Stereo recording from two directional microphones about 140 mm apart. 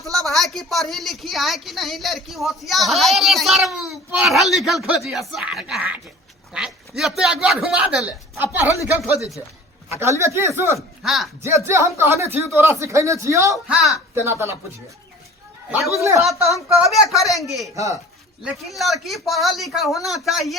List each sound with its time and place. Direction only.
0.0 s a woman's voice: centre (ahead or behind); by 10.8 s 20° right (ahead or behind)
10.8 s speech: centre (ahead or behind)
11.4 s speech: 20° right (ahead or behind)
13.7 s a woman's voice: 5° right (ahead or behind)
14.2 s speech: 15° right (ahead or behind)
16.0 s speech: 20° right (ahead or behind)
16.8 s a woman's voice: centre (ahead or behind)